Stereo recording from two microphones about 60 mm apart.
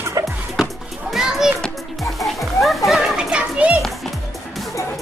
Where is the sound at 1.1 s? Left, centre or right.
Centre.